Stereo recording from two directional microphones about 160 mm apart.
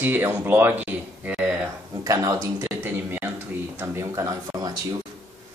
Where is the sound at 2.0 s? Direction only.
20° right (ahead or behind).